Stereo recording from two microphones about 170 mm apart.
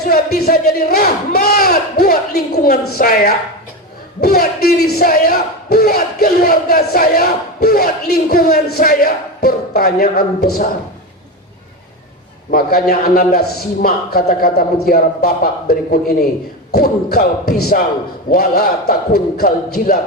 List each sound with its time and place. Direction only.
0.0 s a man's voice: 65° left (ahead or behind)
12.5 s a man's voice: 60° left (ahead or behind)